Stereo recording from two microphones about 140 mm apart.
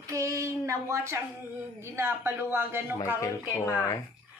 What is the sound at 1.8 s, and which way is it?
A woman's voice, 20° right (ahead or behind).